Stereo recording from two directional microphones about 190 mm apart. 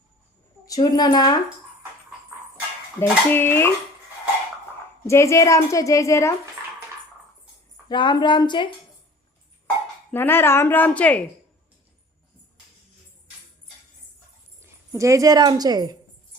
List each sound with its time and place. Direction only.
0.7 s speech: 20° left (ahead or behind)
3.0 s a woman's voice: 10° left (ahead or behind)
5.0 s a woman's voice: 15° left (ahead or behind)
7.9 s speech: 25° left (ahead or behind)
10.1 s a woman's voice: 10° left (ahead or behind)
14.6 s speech: 15° right (ahead or behind)